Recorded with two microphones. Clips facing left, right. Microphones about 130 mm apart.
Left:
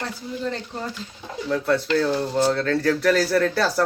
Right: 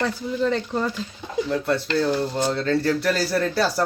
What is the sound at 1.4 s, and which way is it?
Speech, centre (ahead or behind).